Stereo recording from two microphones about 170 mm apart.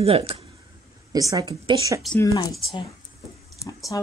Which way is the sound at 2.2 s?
20° left (ahead or behind).